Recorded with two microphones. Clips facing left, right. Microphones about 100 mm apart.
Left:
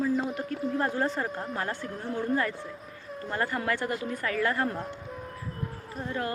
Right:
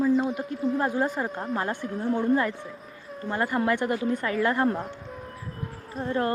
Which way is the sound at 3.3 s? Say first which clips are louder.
Right 4 dB; 15° right (ahead or behind).